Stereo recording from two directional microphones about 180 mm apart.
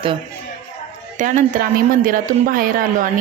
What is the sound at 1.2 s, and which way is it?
A woman's voice, 50° right (ahead or behind).